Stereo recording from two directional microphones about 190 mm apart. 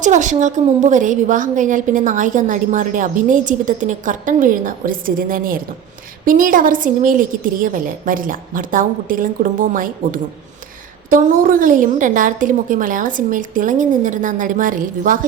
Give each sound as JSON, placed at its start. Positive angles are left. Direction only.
{"t": 0.0, "sound": "a woman's voice", "side_deg": -40}